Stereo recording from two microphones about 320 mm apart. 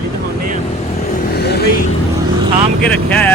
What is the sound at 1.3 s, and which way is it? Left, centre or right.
Vehicle, left.